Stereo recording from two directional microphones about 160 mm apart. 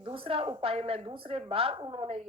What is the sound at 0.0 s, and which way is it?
A woman's voice, 35° right (ahead or behind).